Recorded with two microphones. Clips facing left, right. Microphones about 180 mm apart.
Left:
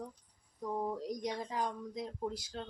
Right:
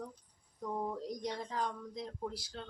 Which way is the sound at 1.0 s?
15° left (ahead or behind).